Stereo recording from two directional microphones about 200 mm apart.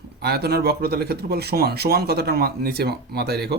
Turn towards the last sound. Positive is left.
turn(degrees=-55)  # may be behind; listen again after turning